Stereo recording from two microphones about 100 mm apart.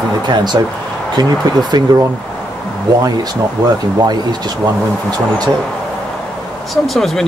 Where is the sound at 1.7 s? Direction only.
45° right (ahead or behind).